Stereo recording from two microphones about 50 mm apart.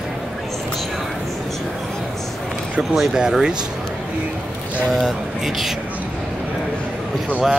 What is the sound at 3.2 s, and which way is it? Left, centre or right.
Speech, centre.